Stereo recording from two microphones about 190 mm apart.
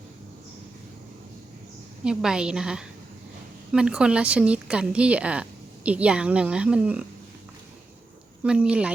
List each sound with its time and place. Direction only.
2.0 s a woman's voice: 5° right (ahead or behind)
8.4 s a woman's voice: 5° right (ahead or behind)